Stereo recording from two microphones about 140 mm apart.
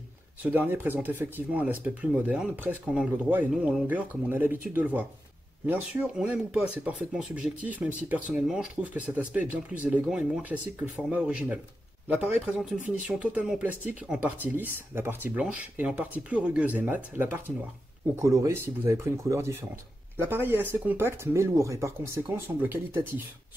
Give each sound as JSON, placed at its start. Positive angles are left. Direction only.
{"t": 0.4, "sound": "speech", "side_deg": -15}